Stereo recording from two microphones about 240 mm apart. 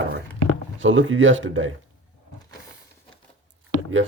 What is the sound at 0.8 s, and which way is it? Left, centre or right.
Speech, right.